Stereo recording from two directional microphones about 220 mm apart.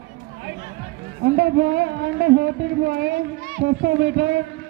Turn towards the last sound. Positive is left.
turn(degrees=-50)  # may be behind; listen again after turning